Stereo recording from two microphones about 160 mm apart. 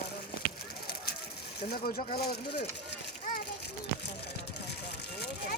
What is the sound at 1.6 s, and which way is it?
Speech, 70° left (ahead or behind).